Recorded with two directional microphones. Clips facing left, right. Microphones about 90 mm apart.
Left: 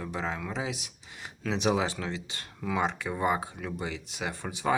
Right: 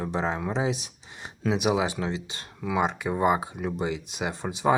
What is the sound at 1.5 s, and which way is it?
Speech, 10° right (ahead or behind).